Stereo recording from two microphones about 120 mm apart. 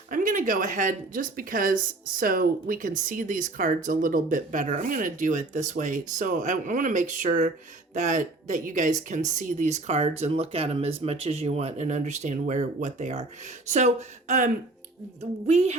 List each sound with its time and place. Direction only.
0.1 s speech: 90° right
2.6 s speech: 90° right
15.4 s speech: 65° right (ahead or behind)